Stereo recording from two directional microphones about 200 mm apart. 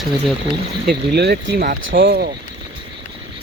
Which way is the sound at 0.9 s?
55° right (ahead or behind).